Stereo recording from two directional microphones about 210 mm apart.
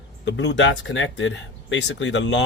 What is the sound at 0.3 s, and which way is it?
Speech, 60° left (ahead or behind).